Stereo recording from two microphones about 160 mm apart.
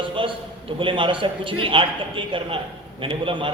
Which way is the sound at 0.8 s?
30° right (ahead or behind).